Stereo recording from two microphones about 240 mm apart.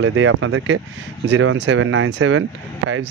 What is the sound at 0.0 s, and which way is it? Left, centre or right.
A man's voice, right.